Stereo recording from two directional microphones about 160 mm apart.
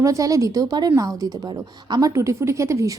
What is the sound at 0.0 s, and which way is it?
A woman's voice, 20° right (ahead or behind).